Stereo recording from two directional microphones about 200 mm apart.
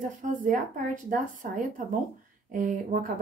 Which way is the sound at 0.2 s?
40° right (ahead or behind).